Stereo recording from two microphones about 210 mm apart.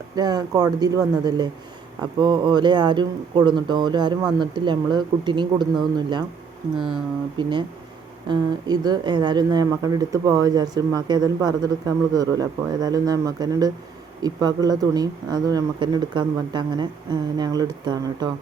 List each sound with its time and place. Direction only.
0.2 s speech: 20° right (ahead or behind)
8.3 s speech: 20° right (ahead or behind)